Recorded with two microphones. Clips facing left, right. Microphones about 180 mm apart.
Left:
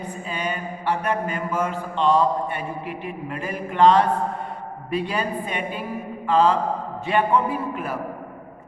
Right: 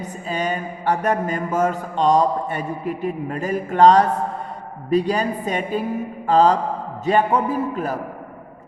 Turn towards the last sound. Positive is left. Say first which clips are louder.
# right 4 dB
turn(degrees=-40)  # may be behind; listen again after turning